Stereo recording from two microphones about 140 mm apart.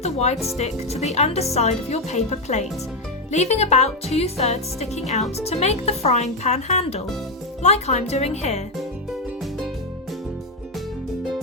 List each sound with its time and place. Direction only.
0.0 s speech: 50° left (ahead or behind)